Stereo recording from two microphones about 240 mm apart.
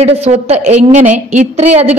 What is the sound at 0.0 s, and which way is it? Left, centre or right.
A woman's voice, right.